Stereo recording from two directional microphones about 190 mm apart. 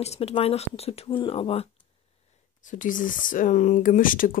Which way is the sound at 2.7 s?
45° left (ahead or behind).